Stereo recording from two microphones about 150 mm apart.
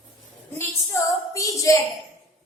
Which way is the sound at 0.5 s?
20° left (ahead or behind).